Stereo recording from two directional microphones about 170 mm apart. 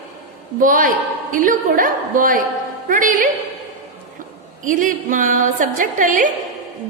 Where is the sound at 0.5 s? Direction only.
55° right (ahead or behind).